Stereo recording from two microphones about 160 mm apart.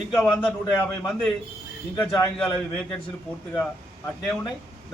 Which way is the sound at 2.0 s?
20° left (ahead or behind).